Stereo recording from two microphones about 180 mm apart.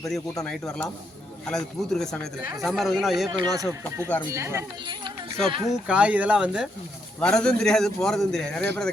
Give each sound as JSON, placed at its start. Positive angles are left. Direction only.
{"t": 0.0, "sound": "a man's voice", "side_deg": 0}
{"t": 3.2, "sound": "speech", "side_deg": -20}
{"t": 5.9, "sound": "a man's voice", "side_deg": -5}